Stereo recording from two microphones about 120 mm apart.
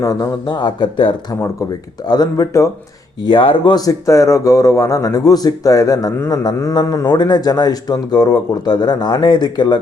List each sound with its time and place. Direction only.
0.0 s a man's voice: 30° left (ahead or behind)
3.2 s a man's voice: 45° left (ahead or behind)